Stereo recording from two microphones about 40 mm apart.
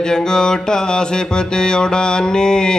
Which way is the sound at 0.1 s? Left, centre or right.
Centre.